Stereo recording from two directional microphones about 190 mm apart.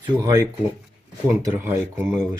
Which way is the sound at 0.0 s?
20° right (ahead or behind).